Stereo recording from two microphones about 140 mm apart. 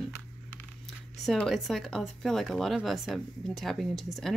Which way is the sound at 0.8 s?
Centre (ahead or behind).